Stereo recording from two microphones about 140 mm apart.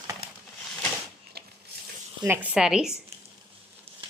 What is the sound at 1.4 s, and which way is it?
Printer, 90° right.